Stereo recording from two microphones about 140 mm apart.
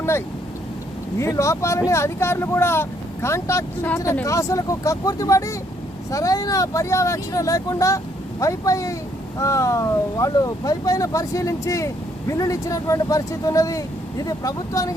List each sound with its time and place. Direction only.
1.2 s speech: 20° left (ahead or behind)